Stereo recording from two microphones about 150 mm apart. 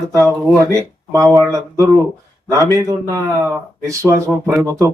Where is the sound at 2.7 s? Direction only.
20° right (ahead or behind).